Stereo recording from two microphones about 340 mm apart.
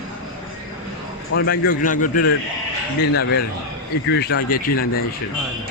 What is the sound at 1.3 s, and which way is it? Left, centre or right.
A man's voice, left.